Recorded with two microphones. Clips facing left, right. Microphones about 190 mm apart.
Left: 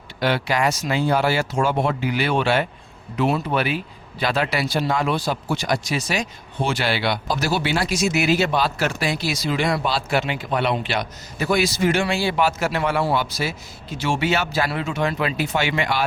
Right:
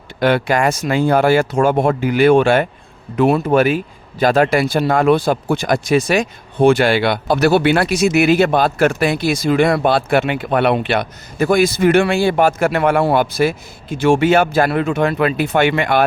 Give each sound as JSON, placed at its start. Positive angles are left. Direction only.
{"t": 0.2, "sound": "speech", "side_deg": -50}